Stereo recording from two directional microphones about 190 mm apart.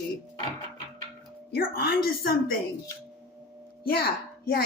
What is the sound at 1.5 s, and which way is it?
A woman's voice, 55° left (ahead or behind).